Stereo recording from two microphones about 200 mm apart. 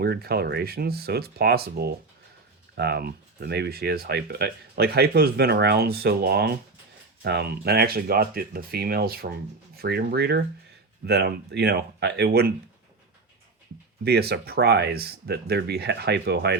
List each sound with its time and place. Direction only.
0.0 s speech: 50° right (ahead or behind)
14.0 s speech: 55° right (ahead or behind)